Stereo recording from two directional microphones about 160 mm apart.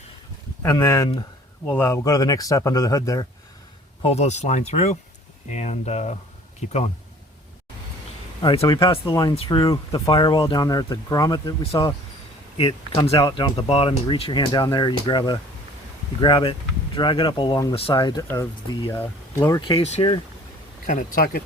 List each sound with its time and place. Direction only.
0.6 s speech: 15° left (ahead or behind)
4.0 s speech: 40° left (ahead or behind)
8.4 s speech: 30° left (ahead or behind)
12.5 s speech: 35° left (ahead or behind)
19.4 s speech: 25° left (ahead or behind)
19.8 s speech: 35° left (ahead or behind)
20.8 s speech: 60° left (ahead or behind)